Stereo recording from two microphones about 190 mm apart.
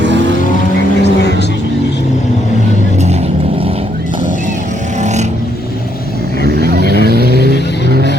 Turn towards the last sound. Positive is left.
turn(degrees=-55)  # may be behind; listen again after turning